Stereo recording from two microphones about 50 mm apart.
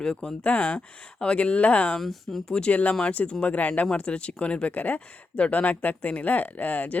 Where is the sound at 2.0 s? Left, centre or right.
Centre.